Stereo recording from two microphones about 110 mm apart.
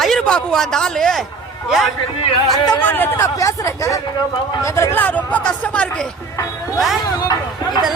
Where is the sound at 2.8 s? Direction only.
20° left (ahead or behind).